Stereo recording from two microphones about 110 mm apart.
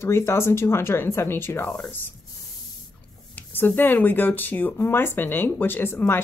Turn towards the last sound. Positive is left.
turn(degrees=20)  # may be behind; listen again after turning